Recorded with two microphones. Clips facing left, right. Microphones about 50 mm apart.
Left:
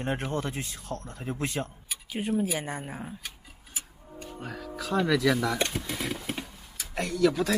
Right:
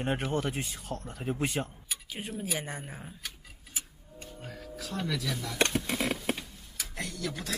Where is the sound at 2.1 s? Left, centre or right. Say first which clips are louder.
Left 8 dB; centre.